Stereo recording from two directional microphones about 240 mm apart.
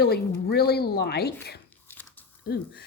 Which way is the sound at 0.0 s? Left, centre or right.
Left.